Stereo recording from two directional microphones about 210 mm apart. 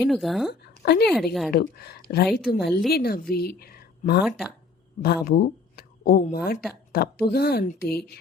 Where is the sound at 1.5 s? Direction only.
45° left (ahead or behind).